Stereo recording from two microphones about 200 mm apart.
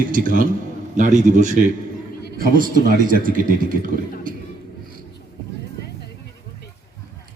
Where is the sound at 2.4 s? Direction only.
45° right (ahead or behind).